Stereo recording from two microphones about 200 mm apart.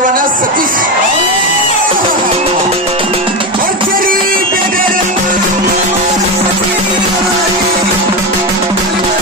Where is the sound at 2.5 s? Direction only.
30° right (ahead or behind).